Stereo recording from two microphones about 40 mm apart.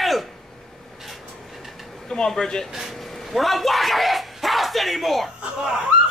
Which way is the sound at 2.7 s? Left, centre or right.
Centre.